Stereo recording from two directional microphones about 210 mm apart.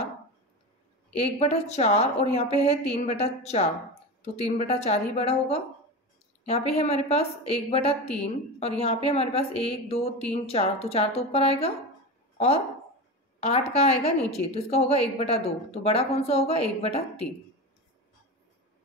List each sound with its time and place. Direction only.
1.1 s a woman's voice: 30° left (ahead or behind)
13.4 s a woman's voice: 30° left (ahead or behind)